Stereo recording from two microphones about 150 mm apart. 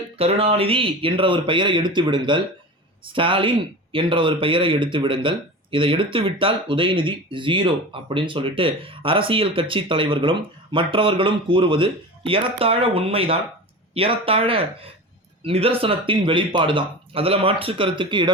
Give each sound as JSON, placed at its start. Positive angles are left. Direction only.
{"t": 0.2, "sound": "speech", "side_deg": -40}